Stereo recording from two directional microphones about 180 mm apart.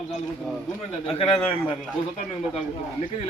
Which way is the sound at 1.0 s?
30° left (ahead or behind).